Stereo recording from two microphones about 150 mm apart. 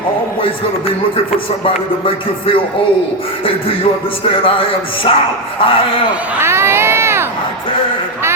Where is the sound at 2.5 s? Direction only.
35° left (ahead or behind).